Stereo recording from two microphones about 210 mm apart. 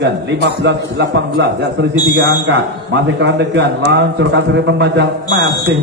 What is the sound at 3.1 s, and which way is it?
Speech, 55° right (ahead or behind).